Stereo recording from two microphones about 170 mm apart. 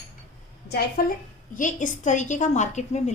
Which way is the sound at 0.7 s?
70° left (ahead or behind).